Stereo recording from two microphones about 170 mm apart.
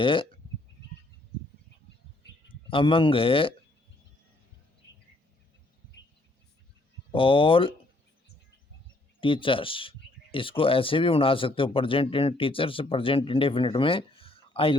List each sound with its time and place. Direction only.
0.0 s speech: 30° left (ahead or behind)
2.6 s speech: 30° left (ahead or behind)
4.8 s bird: 90° left
7.1 s speech: 30° left (ahead or behind)
9.2 s speech: 30° left (ahead or behind)